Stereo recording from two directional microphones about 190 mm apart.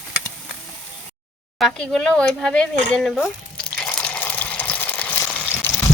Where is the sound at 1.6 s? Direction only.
Centre (ahead or behind).